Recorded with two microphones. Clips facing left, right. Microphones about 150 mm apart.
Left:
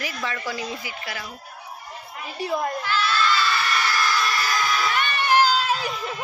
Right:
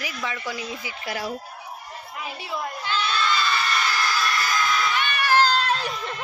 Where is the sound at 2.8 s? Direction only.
20° right (ahead or behind).